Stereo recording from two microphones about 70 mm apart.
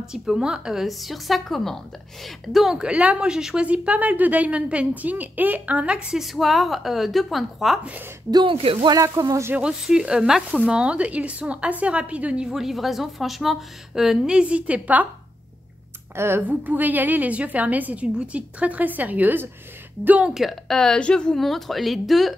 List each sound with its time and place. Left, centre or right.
0.1 s a woman's voice: centre
6.0 s speech: centre
8.3 s a woman's voice: right
9.6 s a woman's voice: centre
16.2 s a woman's voice: right
20.2 s speech: centre